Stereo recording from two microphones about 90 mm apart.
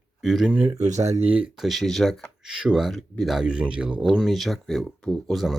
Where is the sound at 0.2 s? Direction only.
Centre (ahead or behind).